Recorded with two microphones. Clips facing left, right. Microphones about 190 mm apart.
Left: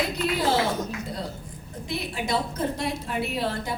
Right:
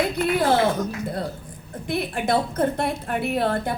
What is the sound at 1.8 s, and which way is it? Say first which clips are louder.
A woman's voice: right 6 dB; 55° right (ahead or behind).